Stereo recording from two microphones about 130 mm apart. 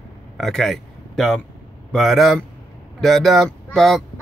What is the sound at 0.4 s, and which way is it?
Speech, centre (ahead or behind).